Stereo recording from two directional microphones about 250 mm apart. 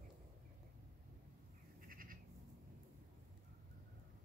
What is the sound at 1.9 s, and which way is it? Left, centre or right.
Goat, right.